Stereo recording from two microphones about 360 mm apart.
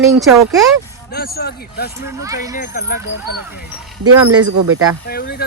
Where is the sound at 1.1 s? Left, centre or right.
Left.